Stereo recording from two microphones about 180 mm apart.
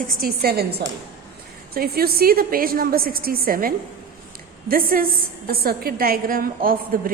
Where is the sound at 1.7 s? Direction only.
55° right (ahead or behind).